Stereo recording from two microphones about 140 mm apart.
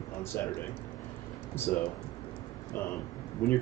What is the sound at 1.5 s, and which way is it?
Speech, 15° left (ahead or behind).